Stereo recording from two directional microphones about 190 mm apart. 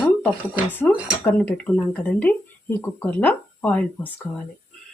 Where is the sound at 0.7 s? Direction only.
5° left (ahead or behind).